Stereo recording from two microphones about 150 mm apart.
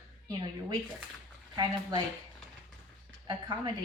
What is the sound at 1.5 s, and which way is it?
Speech, 30° right (ahead or behind).